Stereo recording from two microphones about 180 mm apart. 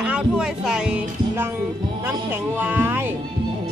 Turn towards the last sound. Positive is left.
turn(degrees=-10)  # may be behind; listen again after turning